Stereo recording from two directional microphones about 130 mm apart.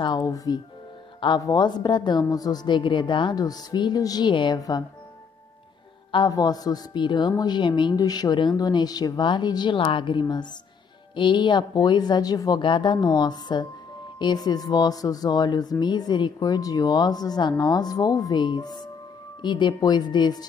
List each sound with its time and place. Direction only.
0.0 s speech: 30° left (ahead or behind)
6.1 s speech: 30° left (ahead or behind)